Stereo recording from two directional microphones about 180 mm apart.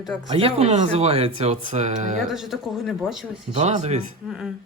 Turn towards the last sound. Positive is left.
turn(degrees=-5)  # may be behind; listen again after turning